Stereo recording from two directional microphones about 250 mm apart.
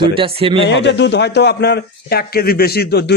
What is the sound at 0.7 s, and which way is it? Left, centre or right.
A man's voice, left.